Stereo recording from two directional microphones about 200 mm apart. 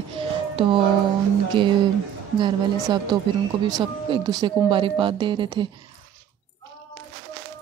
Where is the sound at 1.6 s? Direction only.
25° right (ahead or behind).